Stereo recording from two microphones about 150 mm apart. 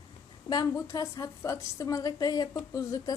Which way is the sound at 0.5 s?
25° left (ahead or behind).